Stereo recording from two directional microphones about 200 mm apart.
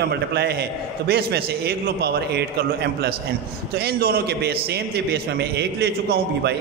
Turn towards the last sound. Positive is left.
turn(degrees=-55)  # may be behind; listen again after turning